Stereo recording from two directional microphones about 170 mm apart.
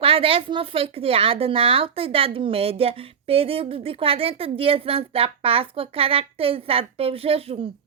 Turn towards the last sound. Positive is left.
turn(degrees=-35)  # may be behind; listen again after turning